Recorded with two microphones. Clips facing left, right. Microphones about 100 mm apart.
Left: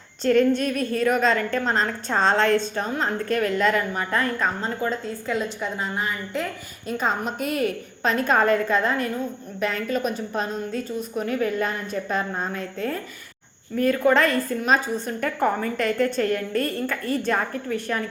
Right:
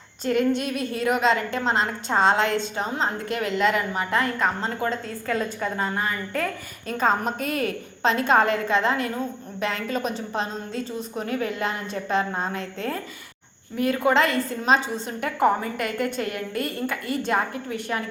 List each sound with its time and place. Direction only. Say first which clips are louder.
0.3 s a woman's voice: left 3 dB; 15° right (ahead or behind)
6.8 s a woman's voice: right 2 dB; 40° right (ahead or behind)
13.7 s a woman's voice: left 2 dB; 20° right (ahead or behind)